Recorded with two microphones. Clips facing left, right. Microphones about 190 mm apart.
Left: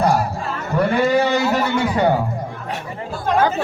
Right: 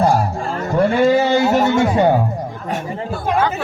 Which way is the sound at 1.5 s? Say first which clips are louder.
Right 4 dB; 45° right (ahead or behind).